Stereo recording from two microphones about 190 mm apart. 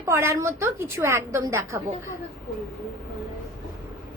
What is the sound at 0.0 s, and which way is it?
A woman's voice, 15° right (ahead or behind).